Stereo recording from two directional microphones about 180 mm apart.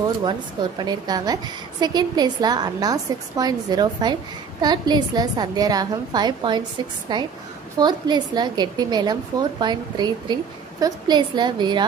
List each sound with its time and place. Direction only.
0.2 s a woman's voice: 25° right (ahead or behind)